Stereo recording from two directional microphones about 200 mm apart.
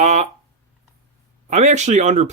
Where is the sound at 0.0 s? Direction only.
35° right (ahead or behind).